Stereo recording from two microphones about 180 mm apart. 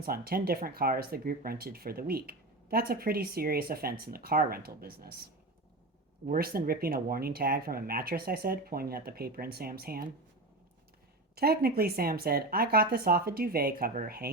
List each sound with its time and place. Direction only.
0.0 s speech: 55° right (ahead or behind)
6.2 s speech: 55° right (ahead or behind)
11.3 s speech: 60° right (ahead or behind)